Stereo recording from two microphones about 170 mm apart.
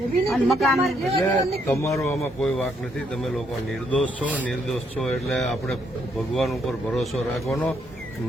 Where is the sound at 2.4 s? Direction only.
Centre (ahead or behind).